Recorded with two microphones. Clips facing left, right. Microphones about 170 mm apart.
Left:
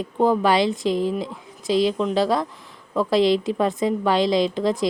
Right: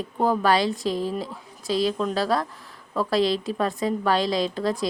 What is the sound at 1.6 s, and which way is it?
A woman's voice, 20° left (ahead or behind).